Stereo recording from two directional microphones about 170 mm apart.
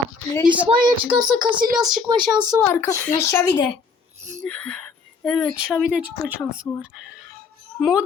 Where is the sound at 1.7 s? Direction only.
Centre (ahead or behind).